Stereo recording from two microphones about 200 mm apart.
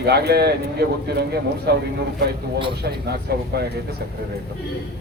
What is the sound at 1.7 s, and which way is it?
A man's voice, 55° right (ahead or behind).